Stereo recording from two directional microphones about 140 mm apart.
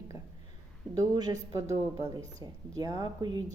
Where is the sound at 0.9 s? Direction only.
25° right (ahead or behind).